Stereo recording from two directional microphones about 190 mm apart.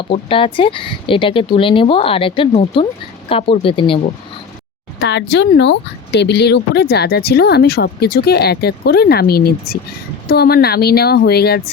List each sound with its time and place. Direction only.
0.1 s speech: 25° left (ahead or behind)
4.9 s speech: 60° left (ahead or behind)